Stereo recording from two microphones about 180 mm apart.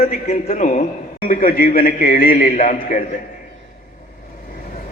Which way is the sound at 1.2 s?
50° left (ahead or behind).